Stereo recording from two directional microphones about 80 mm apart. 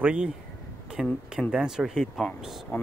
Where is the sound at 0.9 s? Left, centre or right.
Centre.